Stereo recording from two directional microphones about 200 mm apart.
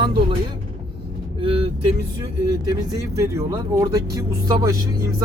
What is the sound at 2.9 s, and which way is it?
Speech, 15° right (ahead or behind).